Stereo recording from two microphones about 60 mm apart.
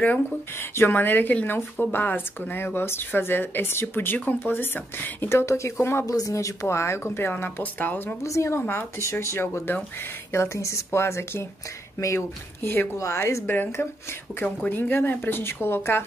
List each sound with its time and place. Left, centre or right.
0.6 s speech: left
5.4 s speech: left
6.0 s a woman's voice: left
8.2 s speech: left
8.5 s speech: left
9.0 s speech: left
12.6 s speech: left
12.9 s a woman's voice: left
14.4 s speech: left
14.8 s speech: left